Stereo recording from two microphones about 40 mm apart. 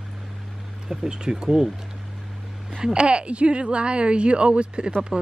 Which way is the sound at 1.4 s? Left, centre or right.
Centre.